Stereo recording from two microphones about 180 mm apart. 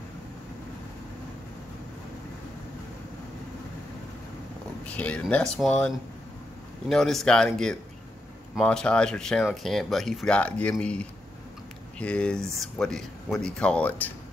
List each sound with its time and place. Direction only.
4.8 s speech: 5° left (ahead or behind)